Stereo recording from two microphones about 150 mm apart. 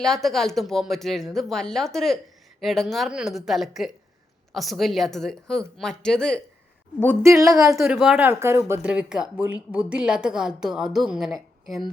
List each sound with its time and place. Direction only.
0.0 s speech: centre (ahead or behind)
7.2 s a woman's voice: 20° right (ahead or behind)
7.8 s speech: 5° right (ahead or behind)